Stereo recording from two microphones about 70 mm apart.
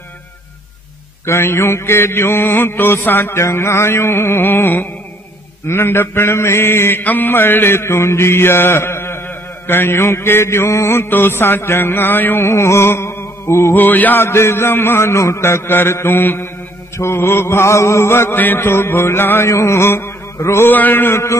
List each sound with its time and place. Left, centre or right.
1.2 s mantra: left
13.7 s mantra: left
20.7 s mantra: left